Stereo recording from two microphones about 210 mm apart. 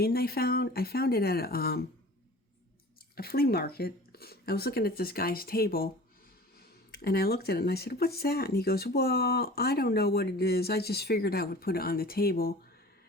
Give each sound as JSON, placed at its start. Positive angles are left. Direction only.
{"t": 0.0, "sound": "speech", "side_deg": 45}
{"t": 3.2, "sound": "speech", "side_deg": 45}
{"t": 6.9, "sound": "speech", "side_deg": 45}